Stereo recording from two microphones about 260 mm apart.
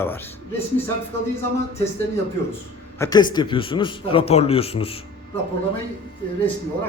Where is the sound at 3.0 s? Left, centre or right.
Centre.